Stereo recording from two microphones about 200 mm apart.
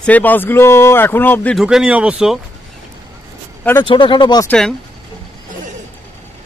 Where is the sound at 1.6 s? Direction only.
5° right (ahead or behind).